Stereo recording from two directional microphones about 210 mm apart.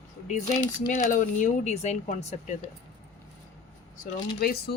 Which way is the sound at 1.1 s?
40° left (ahead or behind).